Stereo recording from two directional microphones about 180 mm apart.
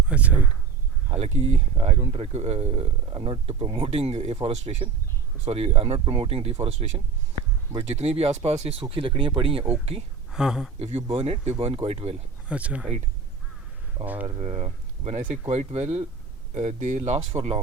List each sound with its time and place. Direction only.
0.1 s speech: 5° right (ahead or behind)
1.1 s speech: 35° right (ahead or behind)
10.3 s speech: 5° right (ahead or behind)
10.8 s speech: 35° right (ahead or behind)
12.5 s speech: 5° right (ahead or behind)
14.0 s speech: 10° right (ahead or behind)
14.3 s speech: 35° right (ahead or behind)